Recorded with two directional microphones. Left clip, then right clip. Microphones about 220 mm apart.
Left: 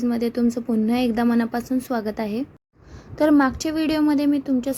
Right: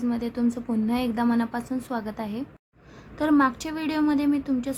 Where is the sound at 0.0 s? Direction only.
15° left (ahead or behind).